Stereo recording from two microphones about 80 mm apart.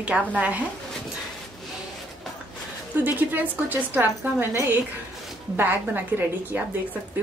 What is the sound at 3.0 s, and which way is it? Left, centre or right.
Speech, right.